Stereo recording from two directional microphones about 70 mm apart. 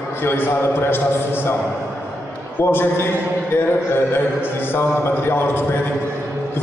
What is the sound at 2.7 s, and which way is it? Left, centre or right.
A man's voice, left.